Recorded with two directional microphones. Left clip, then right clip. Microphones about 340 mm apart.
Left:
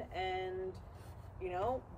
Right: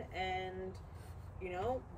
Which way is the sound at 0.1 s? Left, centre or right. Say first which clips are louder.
Left 1 dB; centre.